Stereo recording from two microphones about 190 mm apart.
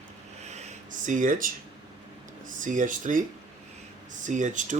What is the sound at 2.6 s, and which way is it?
Speech, 45° right (ahead or behind).